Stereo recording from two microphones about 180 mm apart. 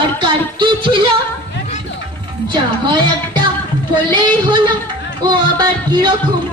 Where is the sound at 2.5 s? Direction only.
25° right (ahead or behind).